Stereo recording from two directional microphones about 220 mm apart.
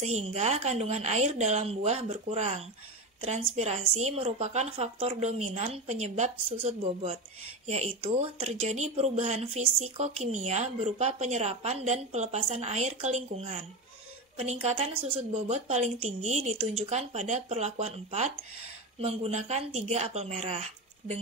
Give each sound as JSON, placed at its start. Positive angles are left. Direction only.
{"t": 0.0, "sound": "a woman's voice", "side_deg": -30}